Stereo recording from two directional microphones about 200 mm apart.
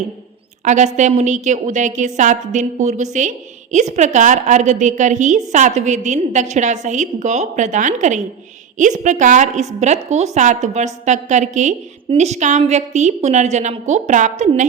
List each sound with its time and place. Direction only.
0.6 s a woman's voice: 35° right (ahead or behind)